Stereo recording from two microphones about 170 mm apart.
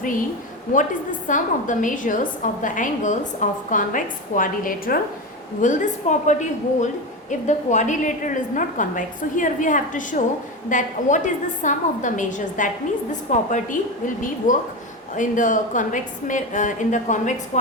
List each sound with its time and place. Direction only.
1.3 s a woman's voice: 50° left (ahead or behind)